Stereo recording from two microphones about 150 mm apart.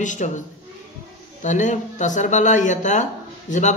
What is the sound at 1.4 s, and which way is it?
Speech, 55° left (ahead or behind).